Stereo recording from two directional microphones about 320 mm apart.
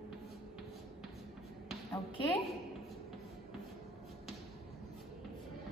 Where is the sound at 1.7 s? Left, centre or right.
Centre.